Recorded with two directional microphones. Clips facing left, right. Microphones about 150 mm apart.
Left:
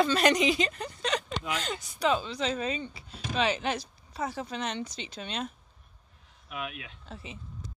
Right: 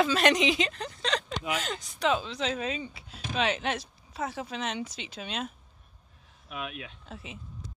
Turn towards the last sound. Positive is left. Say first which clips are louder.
# even
turn(degrees=0)  # may be behind; listen again after turning